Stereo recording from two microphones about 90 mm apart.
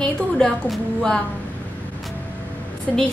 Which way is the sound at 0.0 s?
5° left (ahead or behind).